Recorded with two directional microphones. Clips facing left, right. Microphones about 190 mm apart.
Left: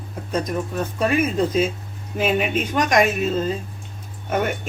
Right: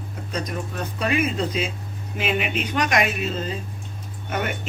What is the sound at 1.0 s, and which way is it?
Speech, 45° left (ahead or behind).